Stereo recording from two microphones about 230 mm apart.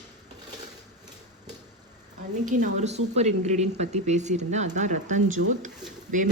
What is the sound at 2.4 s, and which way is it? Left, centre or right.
Speech, right.